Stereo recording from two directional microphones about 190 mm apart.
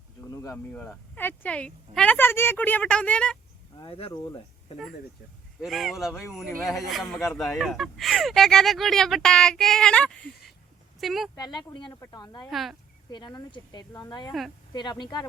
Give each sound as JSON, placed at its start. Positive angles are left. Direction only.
{"t": 0.4, "sound": "speech", "side_deg": 10}
{"t": 3.8, "sound": "speech", "side_deg": 30}
{"t": 5.5, "sound": "speech", "side_deg": 0}
{"t": 11.3, "sound": "speech", "side_deg": 20}
{"t": 12.5, "sound": "speech", "side_deg": 0}
{"t": 13.1, "sound": "speech", "side_deg": 20}